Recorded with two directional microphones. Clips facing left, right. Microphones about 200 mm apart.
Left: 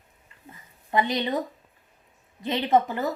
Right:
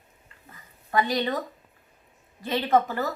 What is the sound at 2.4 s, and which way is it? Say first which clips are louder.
Speech: left 1 dB; 20° left (ahead or behind).